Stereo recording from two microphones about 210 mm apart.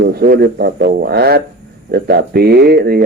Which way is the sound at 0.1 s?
50° right (ahead or behind).